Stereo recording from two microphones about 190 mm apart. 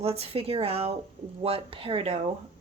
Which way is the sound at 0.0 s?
30° right (ahead or behind).